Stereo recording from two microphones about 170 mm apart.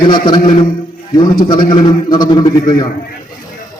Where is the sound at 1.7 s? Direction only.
25° left (ahead or behind).